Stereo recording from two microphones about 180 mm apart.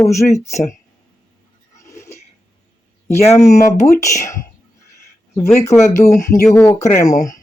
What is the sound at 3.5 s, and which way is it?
Speech, 15° left (ahead or behind).